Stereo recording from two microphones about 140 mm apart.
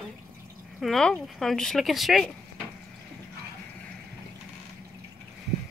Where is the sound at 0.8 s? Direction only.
Centre (ahead or behind).